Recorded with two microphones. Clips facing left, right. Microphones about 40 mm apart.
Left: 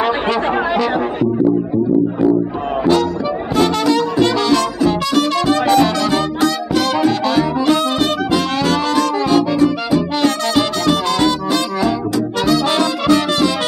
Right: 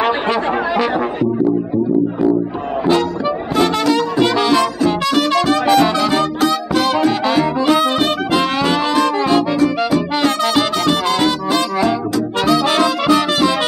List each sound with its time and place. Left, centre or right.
2.8 s music: centre
4.2 s brass instrument: centre
5.8 s music: centre
7.1 s saxophone: centre
8.0 s brass instrument: centre
9.6 s music: centre
10.2 s music: centre
12.5 s brass instrument: centre